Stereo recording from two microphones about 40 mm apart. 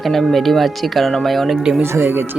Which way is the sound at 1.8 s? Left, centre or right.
Right.